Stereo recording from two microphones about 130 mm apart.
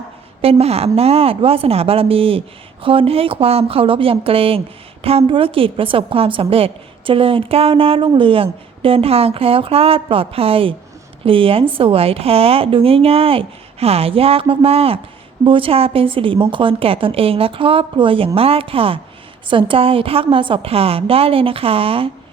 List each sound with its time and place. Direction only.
0.4 s a woman's voice: 50° right (ahead or behind)